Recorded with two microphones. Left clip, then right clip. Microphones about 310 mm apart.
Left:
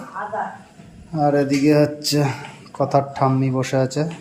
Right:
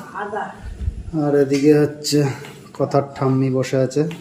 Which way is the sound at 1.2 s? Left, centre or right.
Centre.